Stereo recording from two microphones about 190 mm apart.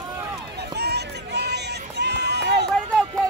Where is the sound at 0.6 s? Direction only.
60° right (ahead or behind).